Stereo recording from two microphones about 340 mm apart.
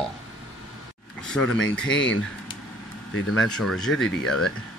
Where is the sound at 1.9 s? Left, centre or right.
Left.